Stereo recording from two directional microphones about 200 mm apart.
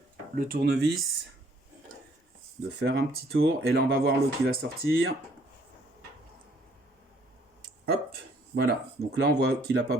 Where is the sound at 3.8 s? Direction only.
50° right (ahead or behind).